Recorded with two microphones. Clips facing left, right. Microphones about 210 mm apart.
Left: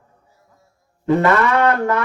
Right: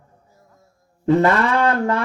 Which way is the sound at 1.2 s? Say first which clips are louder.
Left 1 dB; 30° right (ahead or behind).